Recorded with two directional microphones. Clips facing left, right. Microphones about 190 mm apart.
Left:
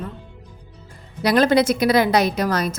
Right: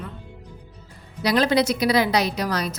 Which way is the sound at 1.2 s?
50° left (ahead or behind).